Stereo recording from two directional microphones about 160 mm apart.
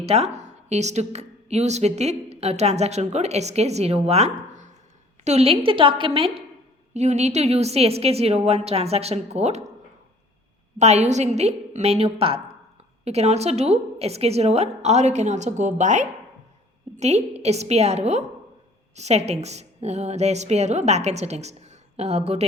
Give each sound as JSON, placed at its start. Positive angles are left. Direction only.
{"t": 0.0, "sound": "a woman's voice", "side_deg": -40}
{"t": 10.8, "sound": "a woman's voice", "side_deg": -45}